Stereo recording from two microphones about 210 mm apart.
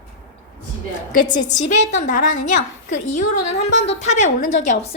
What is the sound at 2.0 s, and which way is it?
Speech, 40° left (ahead or behind).